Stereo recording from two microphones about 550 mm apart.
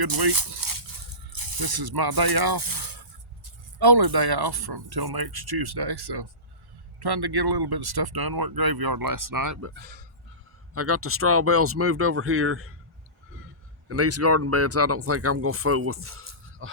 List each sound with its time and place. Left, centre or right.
0.0 s speech: right
13.8 s speech: right